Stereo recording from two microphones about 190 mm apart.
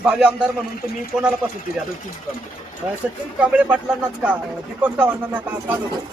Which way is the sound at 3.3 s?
10° right (ahead or behind).